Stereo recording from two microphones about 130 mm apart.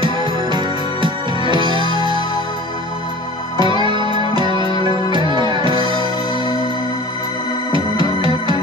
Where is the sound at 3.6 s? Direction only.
35° right (ahead or behind).